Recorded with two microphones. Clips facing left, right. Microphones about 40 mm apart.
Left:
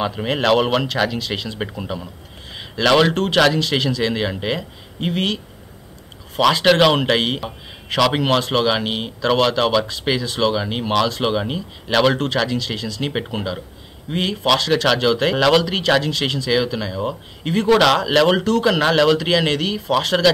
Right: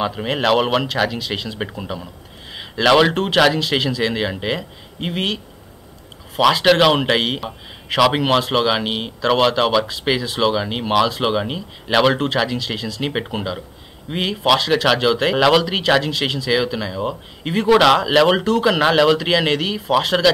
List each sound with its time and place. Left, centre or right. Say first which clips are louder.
0.0 s a man's voice: even; centre